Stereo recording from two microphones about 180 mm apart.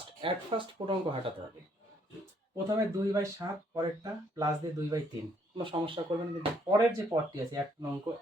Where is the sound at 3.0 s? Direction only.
20° right (ahead or behind).